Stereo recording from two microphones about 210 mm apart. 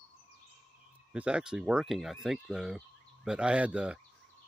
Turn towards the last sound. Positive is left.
turn(degrees=-5)  # may be behind; listen again after turning